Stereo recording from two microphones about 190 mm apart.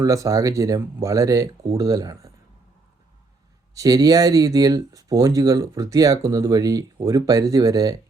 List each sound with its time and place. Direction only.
0.0 s speech: 15° right (ahead or behind)
3.8 s speech: 20° right (ahead or behind)